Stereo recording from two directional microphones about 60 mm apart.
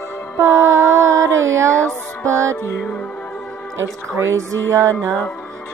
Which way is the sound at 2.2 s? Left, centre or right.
Right.